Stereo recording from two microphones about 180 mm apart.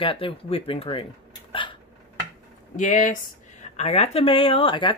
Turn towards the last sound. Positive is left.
turn(degrees=30)  # may be behind; listen again after turning